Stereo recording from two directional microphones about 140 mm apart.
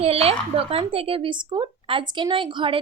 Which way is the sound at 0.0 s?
45° right (ahead or behind).